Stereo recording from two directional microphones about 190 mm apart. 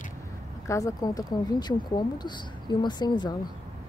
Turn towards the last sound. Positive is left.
turn(degrees=25)  # may be behind; listen again after turning